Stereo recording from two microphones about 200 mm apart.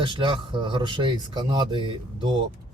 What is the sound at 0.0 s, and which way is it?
Speech, 25° right (ahead or behind).